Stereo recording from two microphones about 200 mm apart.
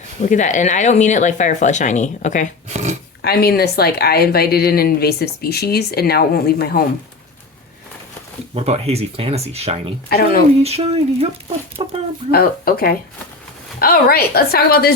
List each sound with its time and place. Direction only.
0.3 s speech: 35° left (ahead or behind)
2.6 s a sound: 35° right (ahead or behind)
3.2 s speech: 50° left (ahead or behind)
8.5 s speech: 30° right (ahead or behind)
10.1 s speech: 50° left (ahead or behind)
10.6 s speech: 30° right (ahead or behind)
12.3 s speech: 50° left (ahead or behind)